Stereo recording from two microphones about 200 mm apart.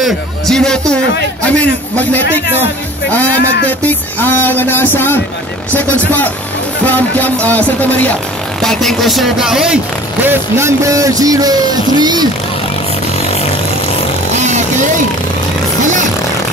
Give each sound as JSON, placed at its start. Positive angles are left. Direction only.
{"t": 0.0, "sound": "speech", "side_deg": 5}
{"t": 1.4, "sound": "music", "side_deg": 5}
{"t": 3.6, "sound": "music", "side_deg": 10}
{"t": 6.9, "sound": "music", "side_deg": 10}
{"t": 8.5, "sound": "speech", "side_deg": 0}